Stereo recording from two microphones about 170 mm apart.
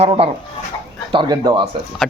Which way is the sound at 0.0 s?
35° right (ahead or behind).